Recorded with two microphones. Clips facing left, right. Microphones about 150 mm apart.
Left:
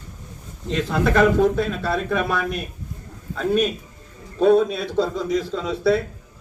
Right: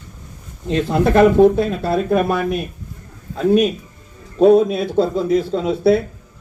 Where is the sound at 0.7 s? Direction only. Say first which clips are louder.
Right 5 dB; 40° right (ahead or behind).